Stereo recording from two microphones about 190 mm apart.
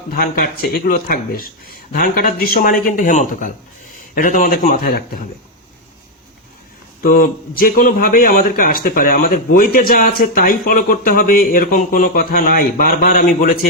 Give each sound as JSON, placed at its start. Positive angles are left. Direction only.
{"t": 0.1, "sound": "a man's voice", "side_deg": 50}
{"t": 7.0, "sound": "a man's voice", "side_deg": 50}